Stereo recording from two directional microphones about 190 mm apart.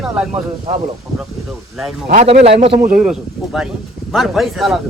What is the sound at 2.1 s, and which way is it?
A man's voice, 35° right (ahead or behind).